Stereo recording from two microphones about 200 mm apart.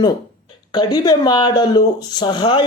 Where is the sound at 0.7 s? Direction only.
20° left (ahead or behind).